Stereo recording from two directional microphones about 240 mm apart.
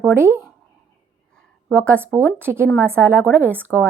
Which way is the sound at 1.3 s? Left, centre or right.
Centre.